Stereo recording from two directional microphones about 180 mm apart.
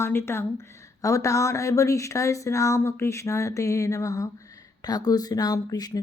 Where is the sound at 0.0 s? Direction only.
15° left (ahead or behind).